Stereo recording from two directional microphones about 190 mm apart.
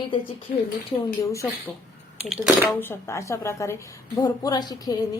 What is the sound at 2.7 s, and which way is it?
A woman's voice, 10° left (ahead or behind).